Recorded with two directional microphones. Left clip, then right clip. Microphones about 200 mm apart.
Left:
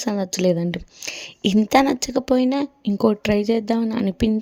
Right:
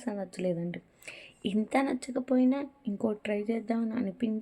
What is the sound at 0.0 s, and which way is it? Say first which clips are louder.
Speech: left 12 dB; 50° left (ahead or behind).